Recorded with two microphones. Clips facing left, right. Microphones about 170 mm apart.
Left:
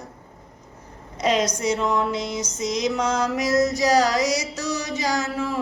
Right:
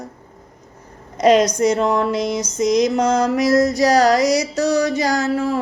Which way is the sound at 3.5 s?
35° right (ahead or behind).